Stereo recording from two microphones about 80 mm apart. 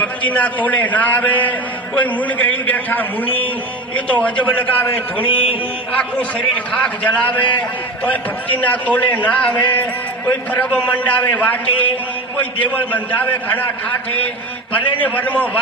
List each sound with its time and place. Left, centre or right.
0.0 s a man's voice: centre
6.5 s a man's voice: centre
14.8 s a man's voice: centre